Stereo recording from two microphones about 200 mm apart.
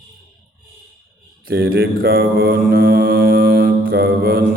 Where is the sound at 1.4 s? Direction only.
45° right (ahead or behind).